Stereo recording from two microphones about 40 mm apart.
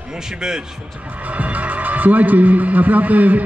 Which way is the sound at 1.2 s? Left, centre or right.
Right.